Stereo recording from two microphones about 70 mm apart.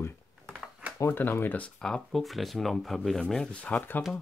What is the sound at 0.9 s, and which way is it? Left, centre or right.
Speech, left.